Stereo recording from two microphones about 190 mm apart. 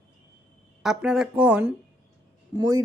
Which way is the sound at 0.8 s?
Centre (ahead or behind).